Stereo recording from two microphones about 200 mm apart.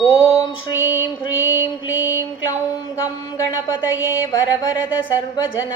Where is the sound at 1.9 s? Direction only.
75° left (ahead or behind).